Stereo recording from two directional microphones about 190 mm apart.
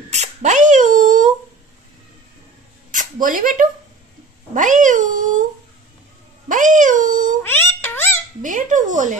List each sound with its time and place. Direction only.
0.1 s a sound: 35° right (ahead or behind)
2.9 s a sound: 45° right (ahead or behind)
4.6 s cat: 40° right (ahead or behind)
6.5 s meow: 40° right (ahead or behind)
7.4 s meow: 10° left (ahead or behind)
8.4 s fowl: 40° right (ahead or behind)